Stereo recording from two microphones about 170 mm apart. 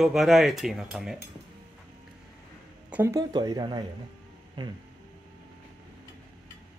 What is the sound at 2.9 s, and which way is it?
Speech, 15° right (ahead or behind).